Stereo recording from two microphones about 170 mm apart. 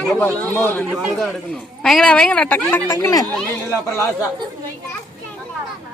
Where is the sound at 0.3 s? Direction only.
10° left (ahead or behind).